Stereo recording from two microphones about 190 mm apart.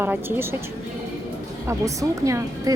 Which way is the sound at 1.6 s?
15° right (ahead or behind).